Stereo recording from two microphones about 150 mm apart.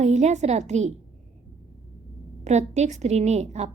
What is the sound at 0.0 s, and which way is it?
Speech, 50° right (ahead or behind).